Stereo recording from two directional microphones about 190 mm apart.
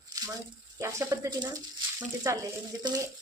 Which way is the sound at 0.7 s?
15° right (ahead or behind).